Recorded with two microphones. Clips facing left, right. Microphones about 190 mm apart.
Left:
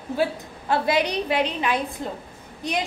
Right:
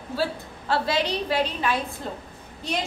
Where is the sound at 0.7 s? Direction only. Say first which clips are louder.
Left 2 dB; 15° left (ahead or behind).